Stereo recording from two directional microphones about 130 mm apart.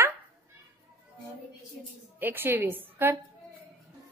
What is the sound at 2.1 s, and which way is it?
A woman's voice, 15° right (ahead or behind).